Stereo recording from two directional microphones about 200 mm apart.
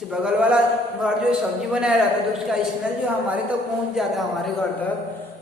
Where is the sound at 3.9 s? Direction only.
Centre (ahead or behind).